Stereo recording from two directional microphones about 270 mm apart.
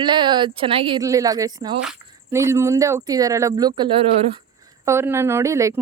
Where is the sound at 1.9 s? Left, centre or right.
Centre.